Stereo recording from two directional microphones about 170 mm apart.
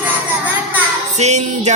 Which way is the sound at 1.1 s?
40° right (ahead or behind).